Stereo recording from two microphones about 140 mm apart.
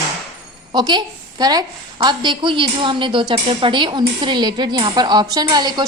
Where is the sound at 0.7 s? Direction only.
30° right (ahead or behind).